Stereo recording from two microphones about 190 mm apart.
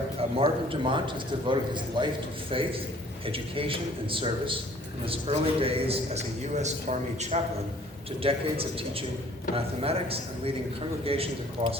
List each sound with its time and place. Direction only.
0.2 s a man's voice: 30° right (ahead or behind)